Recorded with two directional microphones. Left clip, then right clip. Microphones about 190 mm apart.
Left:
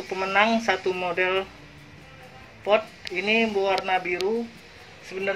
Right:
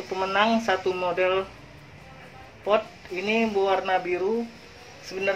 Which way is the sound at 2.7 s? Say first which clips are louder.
Left 1 dB; centre (ahead or behind).